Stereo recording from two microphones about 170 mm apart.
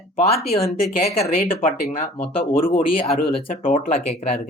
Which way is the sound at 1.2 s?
55° left (ahead or behind).